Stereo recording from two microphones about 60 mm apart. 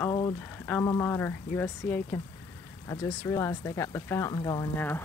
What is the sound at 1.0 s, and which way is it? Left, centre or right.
Speech, left.